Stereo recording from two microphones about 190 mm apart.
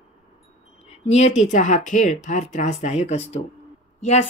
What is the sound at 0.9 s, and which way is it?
Speech, 35° left (ahead or behind).